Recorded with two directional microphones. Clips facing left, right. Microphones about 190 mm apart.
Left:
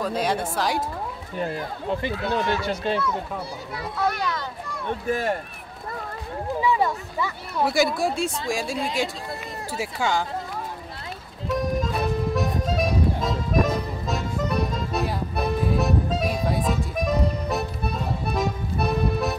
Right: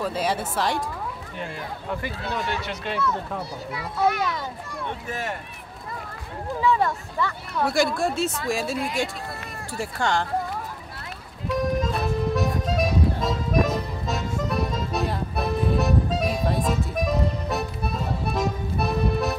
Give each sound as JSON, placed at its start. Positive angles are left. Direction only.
{"t": 0.0, "sound": "speech", "side_deg": -5}
{"t": 1.9, "sound": "speech", "side_deg": 25}
{"t": 5.1, "sound": "speech", "side_deg": 35}
{"t": 6.6, "sound": "speech", "side_deg": 10}
{"t": 11.4, "sound": "accordion", "side_deg": 0}